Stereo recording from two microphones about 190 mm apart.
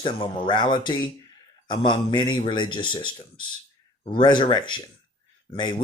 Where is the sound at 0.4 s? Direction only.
25° left (ahead or behind).